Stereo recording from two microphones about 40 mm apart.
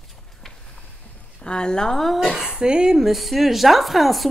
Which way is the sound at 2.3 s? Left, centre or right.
Centre.